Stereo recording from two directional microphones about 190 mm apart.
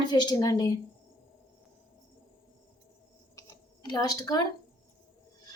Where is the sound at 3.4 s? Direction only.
20° left (ahead or behind).